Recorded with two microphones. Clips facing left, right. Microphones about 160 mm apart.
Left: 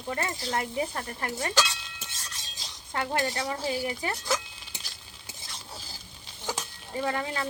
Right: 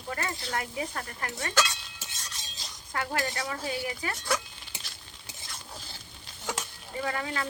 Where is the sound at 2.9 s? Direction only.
25° left (ahead or behind).